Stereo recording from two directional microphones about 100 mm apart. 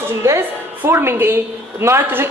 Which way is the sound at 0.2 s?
25° right (ahead or behind).